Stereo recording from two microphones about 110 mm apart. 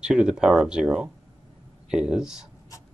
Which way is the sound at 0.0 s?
10° right (ahead or behind).